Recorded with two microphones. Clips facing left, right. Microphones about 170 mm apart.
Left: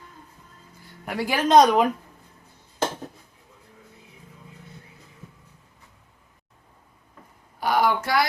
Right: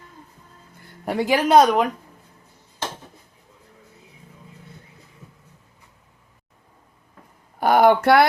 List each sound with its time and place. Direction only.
1.0 s speech: 25° right (ahead or behind)
1.3 s speech: 10° right (ahead or behind)
7.6 s a sound: 55° right (ahead or behind)